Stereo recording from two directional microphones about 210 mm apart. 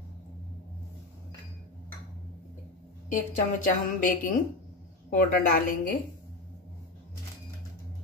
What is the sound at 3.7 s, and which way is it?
A woman's voice, 40° left (ahead or behind).